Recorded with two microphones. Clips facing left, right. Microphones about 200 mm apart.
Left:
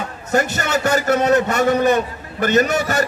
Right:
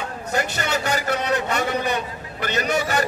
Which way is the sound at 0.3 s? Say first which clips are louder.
Left 6 dB; 45° left (ahead or behind).